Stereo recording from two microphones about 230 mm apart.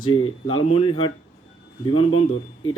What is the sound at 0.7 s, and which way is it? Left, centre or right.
Speech, left.